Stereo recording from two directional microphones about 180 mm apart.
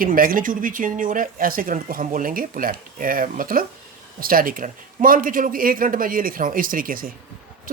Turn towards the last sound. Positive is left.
turn(degrees=-50)  # may be behind; listen again after turning